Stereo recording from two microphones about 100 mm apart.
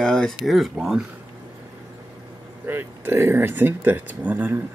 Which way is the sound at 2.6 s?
20° right (ahead or behind).